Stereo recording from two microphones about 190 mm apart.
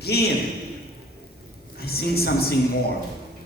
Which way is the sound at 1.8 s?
55° left (ahead or behind).